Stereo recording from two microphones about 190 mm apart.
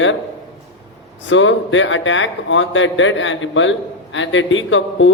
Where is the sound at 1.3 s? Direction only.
85° left.